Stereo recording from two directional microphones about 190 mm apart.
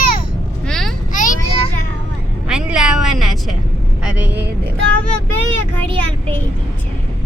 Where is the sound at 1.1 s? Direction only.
45° left (ahead or behind).